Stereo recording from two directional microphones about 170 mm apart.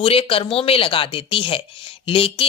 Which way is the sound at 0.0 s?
35° left (ahead or behind).